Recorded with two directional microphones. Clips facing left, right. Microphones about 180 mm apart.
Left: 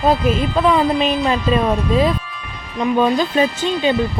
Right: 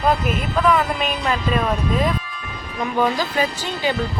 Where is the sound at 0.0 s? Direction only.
30° left (ahead or behind).